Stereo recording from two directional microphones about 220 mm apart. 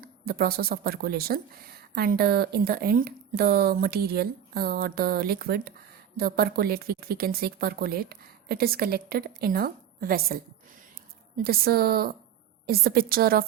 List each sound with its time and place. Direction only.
0.0 s speech: 45° right (ahead or behind)
11.4 s speech: 45° right (ahead or behind)